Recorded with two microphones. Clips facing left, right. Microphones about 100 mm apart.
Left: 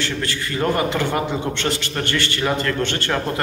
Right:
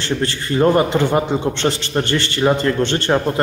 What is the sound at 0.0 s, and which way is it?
A man's voice, 30° right (ahead or behind).